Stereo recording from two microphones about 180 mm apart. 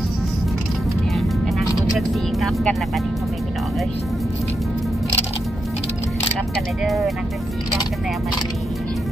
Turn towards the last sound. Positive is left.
turn(degrees=0)  # may be behind; listen again after turning